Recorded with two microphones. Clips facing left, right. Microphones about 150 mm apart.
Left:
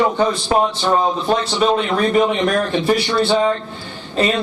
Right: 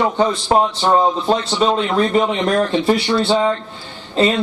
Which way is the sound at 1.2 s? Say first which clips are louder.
Even; 25° right (ahead or behind).